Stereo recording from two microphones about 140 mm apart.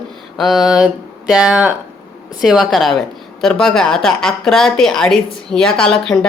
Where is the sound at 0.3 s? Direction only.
Centre (ahead or behind).